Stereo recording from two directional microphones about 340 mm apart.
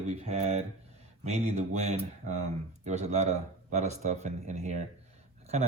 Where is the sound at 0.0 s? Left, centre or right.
Centre.